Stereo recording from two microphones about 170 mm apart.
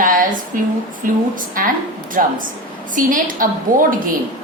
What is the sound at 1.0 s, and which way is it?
A woman's voice, 50° right (ahead or behind).